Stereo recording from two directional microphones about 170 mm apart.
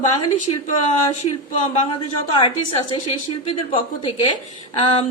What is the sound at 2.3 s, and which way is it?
A woman's voice, 30° left (ahead or behind).